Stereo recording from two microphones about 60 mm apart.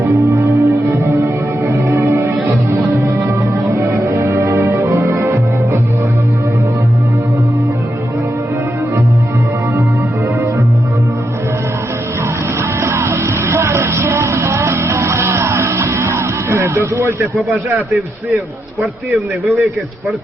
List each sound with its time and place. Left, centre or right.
0.0 s music: right
12.8 s music: right
17.3 s speech: centre